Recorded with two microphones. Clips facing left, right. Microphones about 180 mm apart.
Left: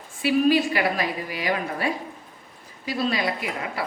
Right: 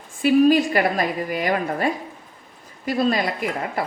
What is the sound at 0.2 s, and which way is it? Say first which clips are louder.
A woman's voice: right 4 dB; 45° right (ahead or behind).